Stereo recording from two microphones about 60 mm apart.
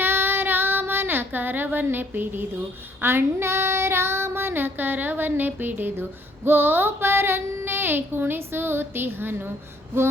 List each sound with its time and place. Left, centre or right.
0.0 s child singing: right
3.0 s female singing: right